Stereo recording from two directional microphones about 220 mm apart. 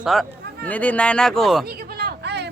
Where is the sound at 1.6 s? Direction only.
45° right (ahead or behind).